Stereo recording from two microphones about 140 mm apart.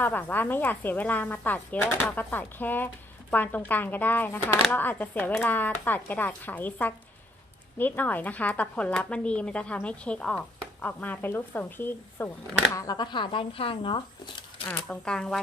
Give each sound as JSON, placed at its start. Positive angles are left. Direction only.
{"t": 0.0, "sound": "a woman's voice", "side_deg": 10}
{"t": 12.7, "sound": "speech", "side_deg": 25}
{"t": 14.7, "sound": "a woman's voice", "side_deg": 10}